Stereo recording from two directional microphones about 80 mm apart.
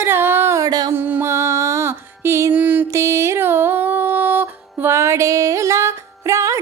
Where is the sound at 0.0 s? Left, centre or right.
Right.